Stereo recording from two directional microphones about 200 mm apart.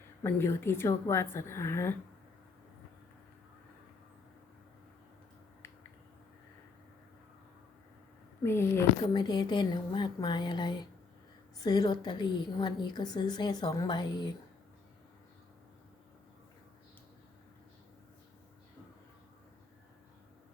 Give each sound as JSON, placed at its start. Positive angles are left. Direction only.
{"t": 0.2, "sound": "a woman's voice", "side_deg": 10}
{"t": 8.4, "sound": "a woman's voice", "side_deg": 10}